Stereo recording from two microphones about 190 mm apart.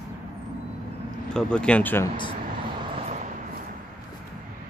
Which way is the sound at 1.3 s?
5° left (ahead or behind).